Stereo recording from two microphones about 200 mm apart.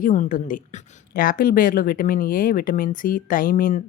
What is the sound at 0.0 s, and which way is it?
A woman's voice, 40° left (ahead or behind).